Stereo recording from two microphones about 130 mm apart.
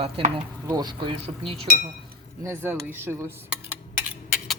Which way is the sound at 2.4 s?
20° right (ahead or behind).